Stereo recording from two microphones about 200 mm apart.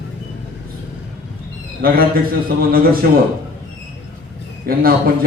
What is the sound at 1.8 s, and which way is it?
Speech, 50° right (ahead or behind).